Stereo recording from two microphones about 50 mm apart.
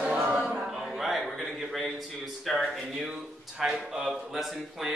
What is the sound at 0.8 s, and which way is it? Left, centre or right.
Speech, centre.